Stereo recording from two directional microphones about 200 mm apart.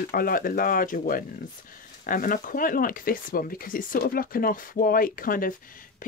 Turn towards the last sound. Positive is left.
turn(degrees=45)  # may be behind; listen again after turning